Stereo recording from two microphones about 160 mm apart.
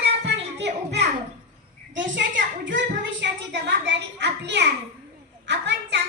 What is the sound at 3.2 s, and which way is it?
A child's voice, 90° right.